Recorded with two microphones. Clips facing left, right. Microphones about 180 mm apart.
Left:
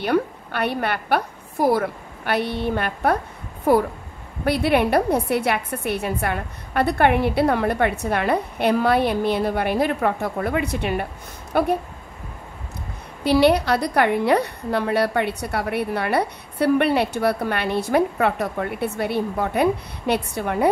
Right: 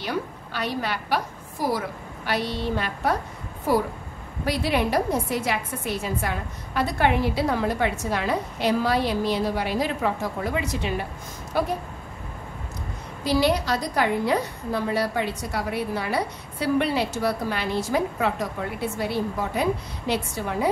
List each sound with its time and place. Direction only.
0.0 s a woman's voice: 60° left (ahead or behind)
13.2 s a woman's voice: 65° left (ahead or behind)